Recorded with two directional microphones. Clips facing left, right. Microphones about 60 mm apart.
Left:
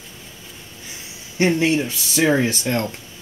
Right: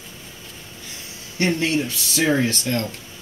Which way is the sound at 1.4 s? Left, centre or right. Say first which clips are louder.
Left 3 dB; centre.